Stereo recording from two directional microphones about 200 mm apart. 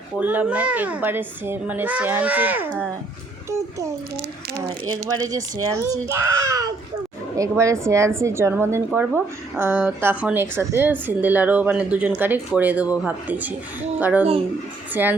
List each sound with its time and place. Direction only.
0.2 s a woman's voice: 5° right (ahead or behind)
5.7 s a woman's voice: 15° right (ahead or behind)